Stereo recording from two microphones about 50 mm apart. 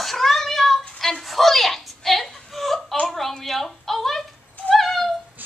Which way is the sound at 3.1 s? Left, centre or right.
Centre.